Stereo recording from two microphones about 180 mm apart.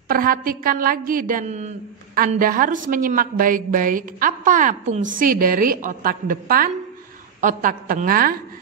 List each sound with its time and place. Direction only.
0.1 s a woman's voice: 50° right (ahead or behind)